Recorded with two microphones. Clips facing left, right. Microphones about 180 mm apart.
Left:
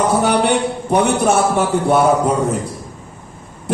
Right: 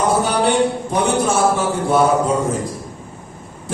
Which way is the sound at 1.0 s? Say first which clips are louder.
Right 1 dB; 65° left (ahead or behind).